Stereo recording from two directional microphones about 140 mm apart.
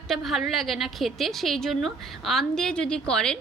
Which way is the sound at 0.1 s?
Centre (ahead or behind).